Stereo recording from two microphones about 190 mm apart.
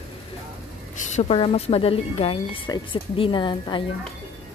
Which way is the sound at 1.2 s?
30° left (ahead or behind).